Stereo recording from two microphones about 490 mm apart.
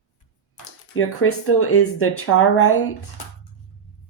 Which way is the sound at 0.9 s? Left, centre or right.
Left.